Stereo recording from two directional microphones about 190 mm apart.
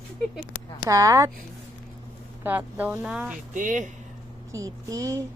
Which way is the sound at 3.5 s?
40° right (ahead or behind).